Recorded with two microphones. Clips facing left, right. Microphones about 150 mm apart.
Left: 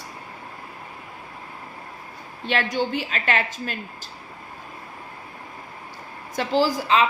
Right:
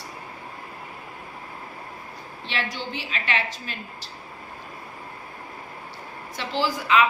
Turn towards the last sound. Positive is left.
turn(degrees=35)  # may be behind; listen again after turning